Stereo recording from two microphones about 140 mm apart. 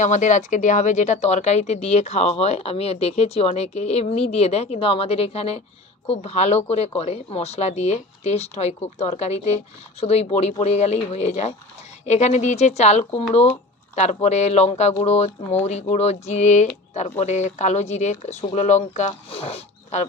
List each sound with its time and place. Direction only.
0.0 s speech: 60° left (ahead or behind)
19.3 s speech: 45° left (ahead or behind)